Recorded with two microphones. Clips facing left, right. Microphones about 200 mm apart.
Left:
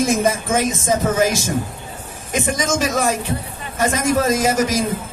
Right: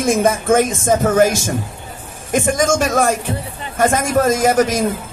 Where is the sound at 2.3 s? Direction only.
50° right (ahead or behind).